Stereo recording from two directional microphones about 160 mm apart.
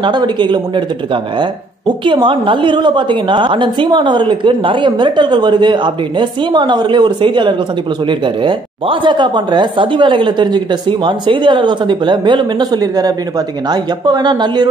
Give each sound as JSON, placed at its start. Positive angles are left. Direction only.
{"t": 0.0, "sound": "speech", "side_deg": -30}